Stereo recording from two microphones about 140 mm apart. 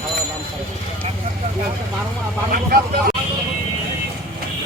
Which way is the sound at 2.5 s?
90° right.